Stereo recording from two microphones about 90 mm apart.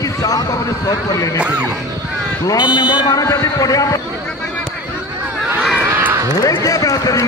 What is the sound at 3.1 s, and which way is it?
Speech, 40° left (ahead or behind).